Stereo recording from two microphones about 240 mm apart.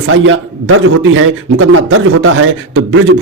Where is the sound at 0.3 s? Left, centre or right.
Right.